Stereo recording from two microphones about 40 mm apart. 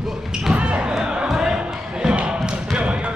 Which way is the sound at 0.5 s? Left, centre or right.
Right.